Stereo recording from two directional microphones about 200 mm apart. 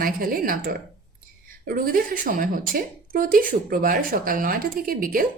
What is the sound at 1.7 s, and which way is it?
A woman's voice, 45° right (ahead or behind).